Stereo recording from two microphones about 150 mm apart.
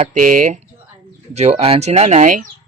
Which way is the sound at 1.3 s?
45° right (ahead or behind).